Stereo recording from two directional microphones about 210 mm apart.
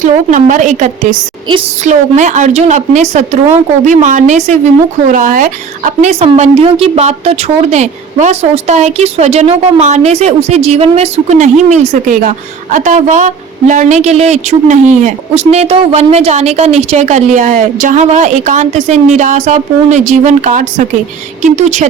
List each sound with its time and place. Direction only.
0.0 s a woman's voice: 35° right (ahead or behind)